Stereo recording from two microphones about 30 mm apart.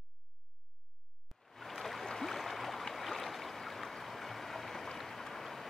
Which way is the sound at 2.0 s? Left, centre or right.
Centre.